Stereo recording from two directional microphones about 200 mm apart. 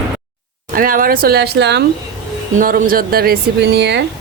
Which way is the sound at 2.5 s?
45° right (ahead or behind).